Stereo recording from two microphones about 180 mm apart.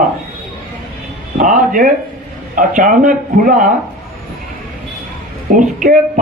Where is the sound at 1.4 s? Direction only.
45° right (ahead or behind).